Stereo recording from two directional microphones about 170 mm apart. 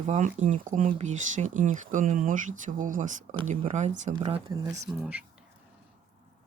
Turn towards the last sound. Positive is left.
turn(degrees=-5)  # may be behind; listen again after turning